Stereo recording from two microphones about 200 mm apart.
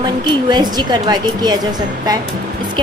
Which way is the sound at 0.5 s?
20° right (ahead or behind).